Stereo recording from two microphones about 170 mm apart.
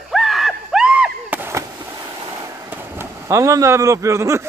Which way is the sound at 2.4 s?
15° right (ahead or behind).